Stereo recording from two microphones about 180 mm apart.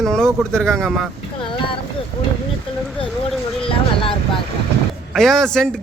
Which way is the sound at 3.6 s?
30° left (ahead or behind).